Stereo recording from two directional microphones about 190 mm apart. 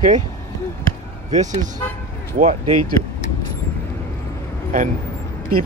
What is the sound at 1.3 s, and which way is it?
Speech, 40° right (ahead or behind).